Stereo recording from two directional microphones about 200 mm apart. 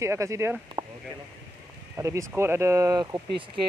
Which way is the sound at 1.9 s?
15° right (ahead or behind).